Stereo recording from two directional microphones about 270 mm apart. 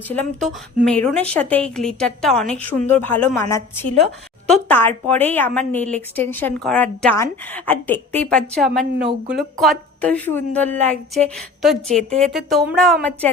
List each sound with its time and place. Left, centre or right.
0.1 s a woman's voice: centre
4.4 s a woman's voice: centre